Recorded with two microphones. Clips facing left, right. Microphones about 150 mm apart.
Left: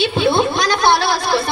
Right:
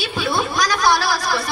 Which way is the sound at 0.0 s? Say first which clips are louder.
Left 7 dB; 25° left (ahead or behind).